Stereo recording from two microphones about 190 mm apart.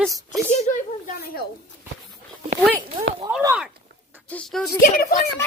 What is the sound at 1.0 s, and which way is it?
Speech, 50° left (ahead or behind).